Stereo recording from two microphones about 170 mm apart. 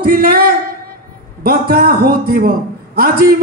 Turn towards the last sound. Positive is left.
turn(degrees=-60)  # may be behind; listen again after turning